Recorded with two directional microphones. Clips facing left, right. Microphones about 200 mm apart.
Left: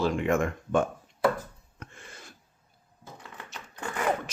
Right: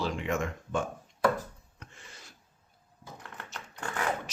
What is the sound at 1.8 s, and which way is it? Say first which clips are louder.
Filing: left 6 dB; 55° left (ahead or behind).